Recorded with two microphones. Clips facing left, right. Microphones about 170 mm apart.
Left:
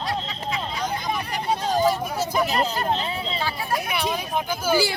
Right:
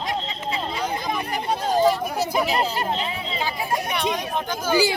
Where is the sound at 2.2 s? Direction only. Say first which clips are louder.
Right 1 dB; 10° right (ahead or behind).